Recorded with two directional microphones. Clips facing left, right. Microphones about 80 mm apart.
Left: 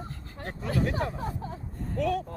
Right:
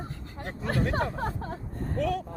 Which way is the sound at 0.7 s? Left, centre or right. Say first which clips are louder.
Right 1 dB; right.